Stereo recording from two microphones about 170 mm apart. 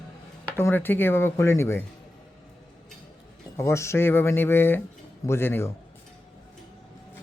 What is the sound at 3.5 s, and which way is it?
Speech, 15° left (ahead or behind).